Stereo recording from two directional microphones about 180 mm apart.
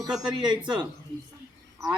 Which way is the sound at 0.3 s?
25° right (ahead or behind).